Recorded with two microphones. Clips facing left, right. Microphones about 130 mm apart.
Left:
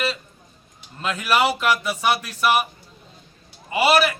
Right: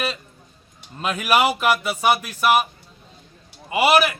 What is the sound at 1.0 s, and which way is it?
Speech, 15° right (ahead or behind).